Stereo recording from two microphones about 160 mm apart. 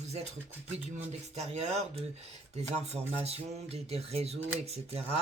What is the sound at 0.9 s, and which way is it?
Speech, 45° right (ahead or behind).